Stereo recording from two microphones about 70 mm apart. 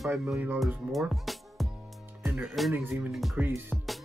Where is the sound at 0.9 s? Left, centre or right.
Centre.